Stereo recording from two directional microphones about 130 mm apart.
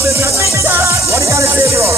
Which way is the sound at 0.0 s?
20° right (ahead or behind).